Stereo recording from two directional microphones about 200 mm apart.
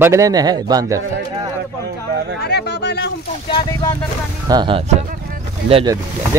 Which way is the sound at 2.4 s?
55° left (ahead or behind).